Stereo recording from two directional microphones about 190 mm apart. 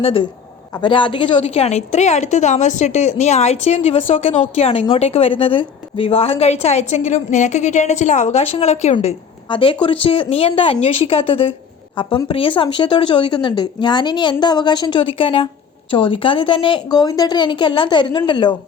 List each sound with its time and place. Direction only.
0.0 s a woman's voice: 30° left (ahead or behind)